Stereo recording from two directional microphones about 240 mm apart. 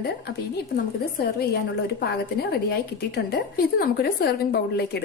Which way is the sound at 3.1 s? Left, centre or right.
Left.